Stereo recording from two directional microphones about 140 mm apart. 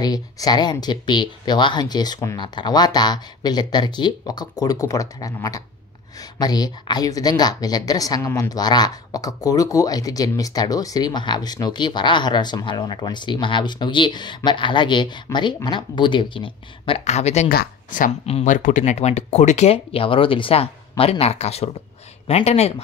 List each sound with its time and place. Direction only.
0.0 s a woman's voice: 30° left (ahead or behind)
17.0 s speech: 50° left (ahead or behind)
17.5 s speech: 75° left (ahead or behind)
18.2 s speech: 45° left (ahead or behind)
18.5 s speech: 65° left (ahead or behind); by 22.8 s 50° left (ahead or behind)